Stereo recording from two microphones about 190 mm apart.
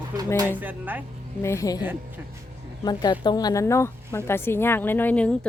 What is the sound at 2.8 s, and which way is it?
A woman's voice, 20° left (ahead or behind).